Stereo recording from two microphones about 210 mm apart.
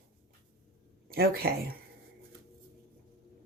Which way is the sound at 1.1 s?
45° right (ahead or behind).